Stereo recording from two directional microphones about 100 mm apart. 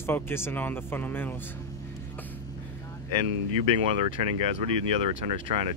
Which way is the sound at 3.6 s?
70° right (ahead or behind).